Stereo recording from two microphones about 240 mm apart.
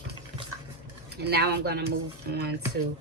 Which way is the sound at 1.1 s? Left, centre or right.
Right.